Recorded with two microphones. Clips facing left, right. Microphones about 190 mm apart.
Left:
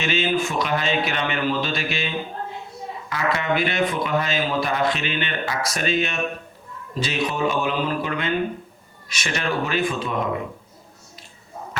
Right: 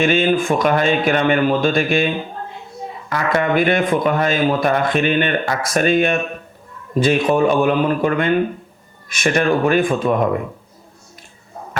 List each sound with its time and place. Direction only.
0.0 s speech: 50° right (ahead or behind)